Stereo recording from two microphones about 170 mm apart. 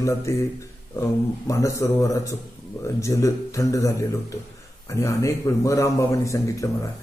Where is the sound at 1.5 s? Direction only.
20° left (ahead or behind).